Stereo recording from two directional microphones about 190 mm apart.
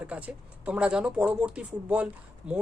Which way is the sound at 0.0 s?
5° right (ahead or behind).